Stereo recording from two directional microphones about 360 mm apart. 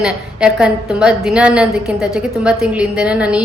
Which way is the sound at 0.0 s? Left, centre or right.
Centre.